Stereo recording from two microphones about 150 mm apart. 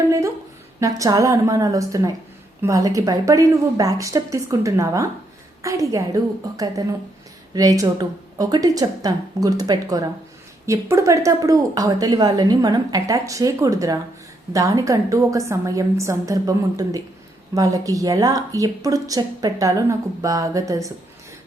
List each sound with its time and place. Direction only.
0.8 s a woman's voice: 20° right (ahead or behind)